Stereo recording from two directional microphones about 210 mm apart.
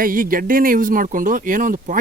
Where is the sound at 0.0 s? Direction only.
40° right (ahead or behind).